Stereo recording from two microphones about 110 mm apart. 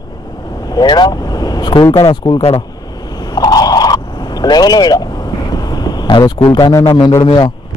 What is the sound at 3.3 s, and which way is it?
Vehicle, 35° left (ahead or behind).